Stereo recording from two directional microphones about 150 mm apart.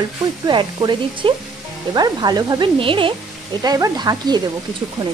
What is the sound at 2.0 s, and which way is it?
Speech, 25° right (ahead or behind).